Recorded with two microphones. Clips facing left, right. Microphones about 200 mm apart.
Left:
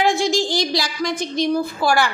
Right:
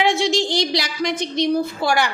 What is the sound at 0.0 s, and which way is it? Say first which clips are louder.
A woman's voice: even; 25° right (ahead or behind).